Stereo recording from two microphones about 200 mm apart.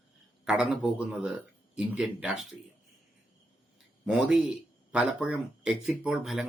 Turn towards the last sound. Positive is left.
turn(degrees=0)  # may be behind; listen again after turning